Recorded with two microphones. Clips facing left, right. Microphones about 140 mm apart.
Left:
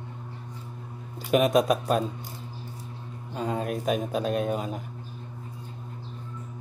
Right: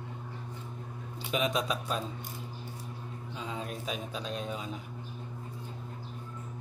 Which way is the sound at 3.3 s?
50° left (ahead or behind).